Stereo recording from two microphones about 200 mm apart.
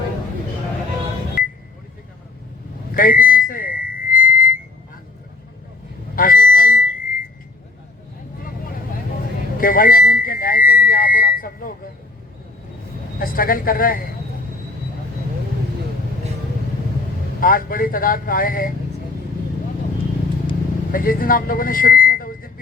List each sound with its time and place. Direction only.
2.9 s vehicle: 45° left (ahead or behind)
6.1 s a sound: 45° left (ahead or behind)
9.6 s whistle: 45° left (ahead or behind)
13.1 s speech: 45° left (ahead or behind)
17.4 s speech: 45° left (ahead or behind)
20.9 s vehicle: 45° left (ahead or behind)